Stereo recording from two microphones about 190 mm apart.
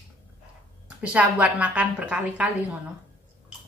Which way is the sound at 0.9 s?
5° right (ahead or behind).